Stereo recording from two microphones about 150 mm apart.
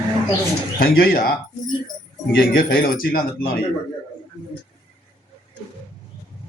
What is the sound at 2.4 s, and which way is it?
Speech, 75° left (ahead or behind).